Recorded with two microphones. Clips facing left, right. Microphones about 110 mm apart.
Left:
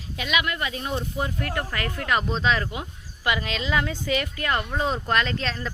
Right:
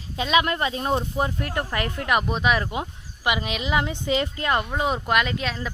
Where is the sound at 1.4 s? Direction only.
20° right (ahead or behind).